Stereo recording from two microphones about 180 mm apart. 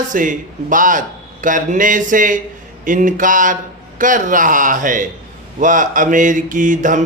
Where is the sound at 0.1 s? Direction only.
45° right (ahead or behind).